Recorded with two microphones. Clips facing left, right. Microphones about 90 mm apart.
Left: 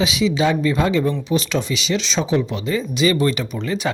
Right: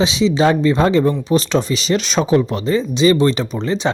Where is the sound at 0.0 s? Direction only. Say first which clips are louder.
Right 4 dB; 30° right (ahead or behind).